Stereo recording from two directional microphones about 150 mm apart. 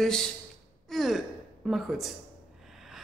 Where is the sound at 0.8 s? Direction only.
Centre (ahead or behind).